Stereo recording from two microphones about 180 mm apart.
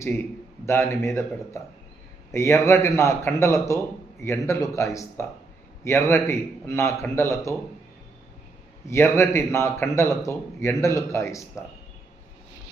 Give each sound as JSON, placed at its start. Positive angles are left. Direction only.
{"t": 0.6, "sound": "a man's voice", "side_deg": 15}
{"t": 8.9, "sound": "a man's voice", "side_deg": 15}